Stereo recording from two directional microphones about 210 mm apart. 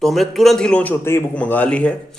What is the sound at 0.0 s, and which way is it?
A man's voice, centre (ahead or behind).